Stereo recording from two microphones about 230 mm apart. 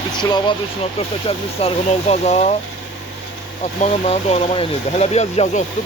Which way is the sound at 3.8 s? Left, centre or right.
Left.